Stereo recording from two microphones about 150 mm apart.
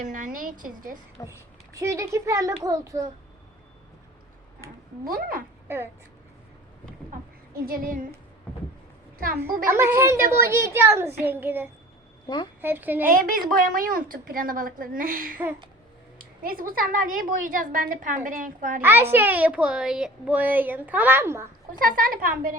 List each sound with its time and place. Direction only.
0.0 s a woman's voice: 60° right (ahead or behind)
1.3 s a child's voice: 20° right (ahead or behind)
5.0 s a woman's voice: 70° right (ahead or behind)
5.6 s speech: 15° right (ahead or behind)
7.6 s a woman's voice: 70° right (ahead or behind)
8.5 s a sound: 10° left (ahead or behind)
9.1 s a child's voice: 75° right (ahead or behind)
9.6 s a woman's voice: 15° right (ahead or behind)
12.3 s a woman's voice: 30° left (ahead or behind)
12.6 s a woman's voice: 15° right (ahead or behind)
13.1 s a woman's voice: 65° right (ahead or behind)
16.4 s a woman's voice: 70° right (ahead or behind)
18.8 s a woman's voice: 15° right (ahead or behind)
21.7 s a woman's voice: 70° right (ahead or behind)